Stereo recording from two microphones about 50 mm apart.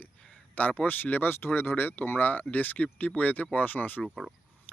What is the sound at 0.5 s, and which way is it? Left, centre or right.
Speech, left.